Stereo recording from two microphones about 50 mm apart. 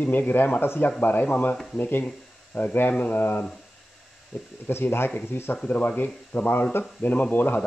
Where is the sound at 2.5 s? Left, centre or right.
Left.